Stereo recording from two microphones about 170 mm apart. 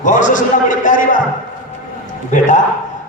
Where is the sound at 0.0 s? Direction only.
50° left (ahead or behind).